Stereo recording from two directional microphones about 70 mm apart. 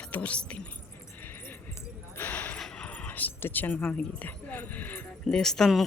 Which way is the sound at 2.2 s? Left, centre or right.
Left.